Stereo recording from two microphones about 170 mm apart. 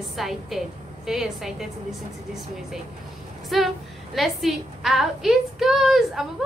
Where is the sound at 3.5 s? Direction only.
Centre (ahead or behind).